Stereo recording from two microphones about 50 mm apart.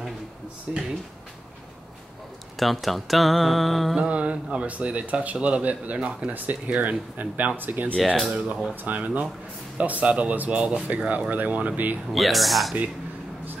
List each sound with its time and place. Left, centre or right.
0.7 s speech: centre
2.6 s speech: centre
4.1 s speech: right
8.3 s speech: right
12.1 s speech: centre